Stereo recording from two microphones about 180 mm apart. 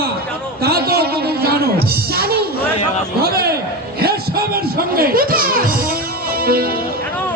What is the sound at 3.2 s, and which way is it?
Speech, 60° right (ahead or behind).